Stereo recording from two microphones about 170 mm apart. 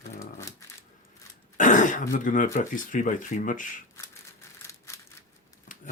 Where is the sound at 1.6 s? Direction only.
50° left (ahead or behind).